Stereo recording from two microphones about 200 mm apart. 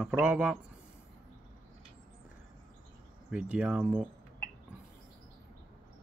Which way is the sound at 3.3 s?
5° right (ahead or behind).